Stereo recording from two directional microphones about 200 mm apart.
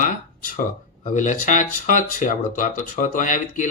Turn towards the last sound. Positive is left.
turn(degrees=40)  # may be behind; listen again after turning